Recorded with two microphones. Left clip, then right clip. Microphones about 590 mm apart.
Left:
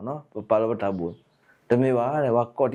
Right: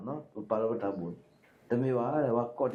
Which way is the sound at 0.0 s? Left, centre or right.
Left.